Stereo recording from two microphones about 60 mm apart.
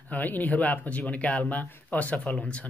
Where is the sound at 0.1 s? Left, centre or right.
Left.